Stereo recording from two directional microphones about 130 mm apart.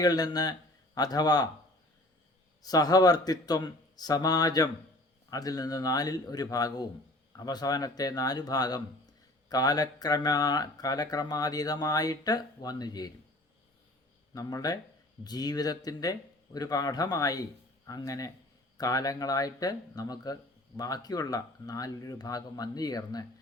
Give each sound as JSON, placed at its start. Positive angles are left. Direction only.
{"t": 0.0, "sound": "speech", "side_deg": 30}
{"t": 2.6, "sound": "speech", "side_deg": 30}
{"t": 14.3, "sound": "speech", "side_deg": 30}